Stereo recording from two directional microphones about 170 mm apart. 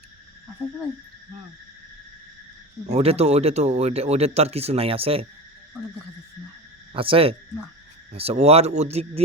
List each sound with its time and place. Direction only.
2.8 s speech: 40° right (ahead or behind)
6.9 s speech: 30° right (ahead or behind)